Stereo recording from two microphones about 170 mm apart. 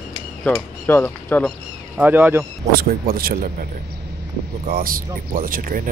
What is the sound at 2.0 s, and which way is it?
Speech, 10° right (ahead or behind).